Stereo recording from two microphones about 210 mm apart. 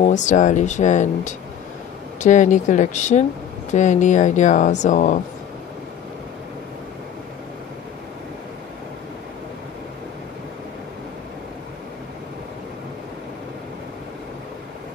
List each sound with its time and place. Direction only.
0.0 s speech: 35° left (ahead or behind)